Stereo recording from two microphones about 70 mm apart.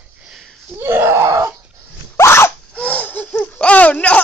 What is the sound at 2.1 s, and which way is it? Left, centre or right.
Dog, left.